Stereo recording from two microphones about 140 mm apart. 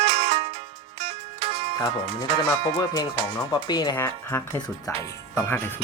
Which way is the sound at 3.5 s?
30° left (ahead or behind).